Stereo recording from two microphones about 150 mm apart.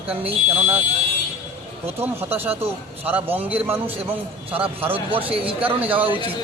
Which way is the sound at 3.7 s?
15° right (ahead or behind).